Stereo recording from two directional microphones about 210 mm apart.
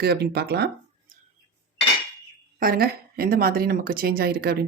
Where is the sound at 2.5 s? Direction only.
45° right (ahead or behind).